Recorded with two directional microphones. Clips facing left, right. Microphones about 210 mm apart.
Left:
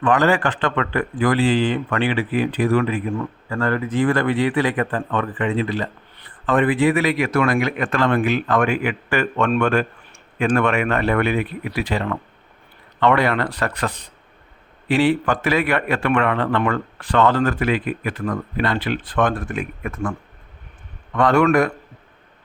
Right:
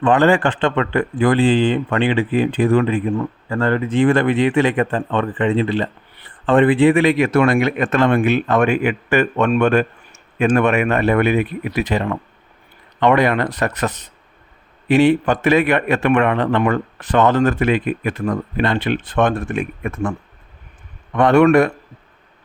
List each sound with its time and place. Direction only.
0.0 s a man's voice: 25° right (ahead or behind)